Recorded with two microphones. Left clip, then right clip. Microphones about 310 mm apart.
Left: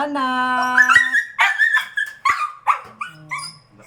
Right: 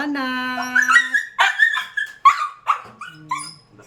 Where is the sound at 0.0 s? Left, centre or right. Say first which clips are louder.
Left 3 dB; centre.